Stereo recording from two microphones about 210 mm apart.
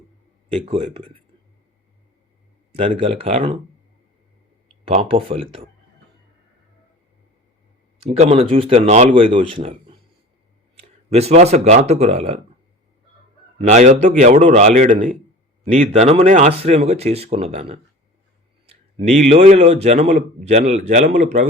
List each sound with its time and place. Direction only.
0.4 s speech: 30° right (ahead or behind)
2.7 s speech: 30° right (ahead or behind)
5.0 s speech: 25° right (ahead or behind)
8.1 s speech: 30° right (ahead or behind)
11.1 s a man's voice: 30° right (ahead or behind)
13.6 s a man's voice: 35° right (ahead or behind)
18.9 s a man's voice: 30° right (ahead or behind)